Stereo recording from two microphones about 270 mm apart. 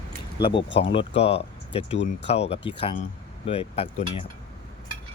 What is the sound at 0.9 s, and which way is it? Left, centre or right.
Speech, left.